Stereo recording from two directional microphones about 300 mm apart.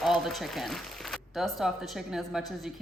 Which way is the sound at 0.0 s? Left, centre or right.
Centre.